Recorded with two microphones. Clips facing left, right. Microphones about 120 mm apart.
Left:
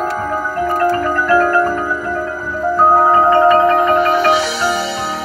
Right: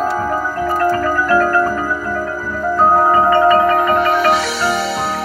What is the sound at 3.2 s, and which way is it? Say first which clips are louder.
Marimba: left 1 dB; 30° left (ahead or behind).